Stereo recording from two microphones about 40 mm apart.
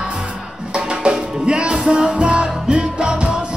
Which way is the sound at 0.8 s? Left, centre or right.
Right.